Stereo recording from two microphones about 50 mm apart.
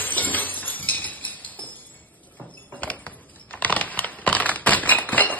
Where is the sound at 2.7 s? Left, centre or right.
Left.